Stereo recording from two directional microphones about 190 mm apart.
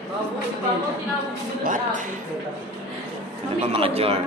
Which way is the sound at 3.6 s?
30° right (ahead or behind).